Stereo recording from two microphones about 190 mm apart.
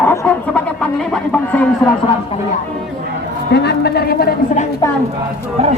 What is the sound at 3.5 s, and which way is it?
A woman's voice, 60° left (ahead or behind).